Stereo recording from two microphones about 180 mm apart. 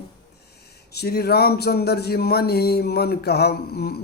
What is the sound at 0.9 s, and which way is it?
Speech, 60° left (ahead or behind).